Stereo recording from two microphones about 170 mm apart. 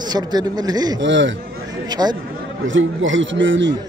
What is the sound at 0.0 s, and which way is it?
Speech, 25° right (ahead or behind).